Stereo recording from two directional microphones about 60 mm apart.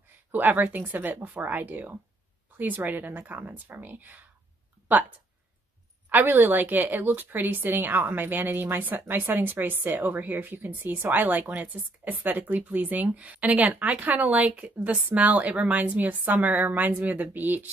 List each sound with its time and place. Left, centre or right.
0.3 s speech: right
6.0 s speech: right